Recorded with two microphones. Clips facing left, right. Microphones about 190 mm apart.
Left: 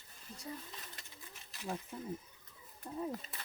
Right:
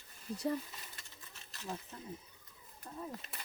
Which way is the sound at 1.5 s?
15° left (ahead or behind).